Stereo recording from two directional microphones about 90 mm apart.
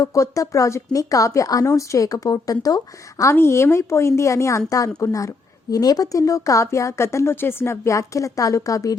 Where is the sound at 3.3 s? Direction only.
30° left (ahead or behind).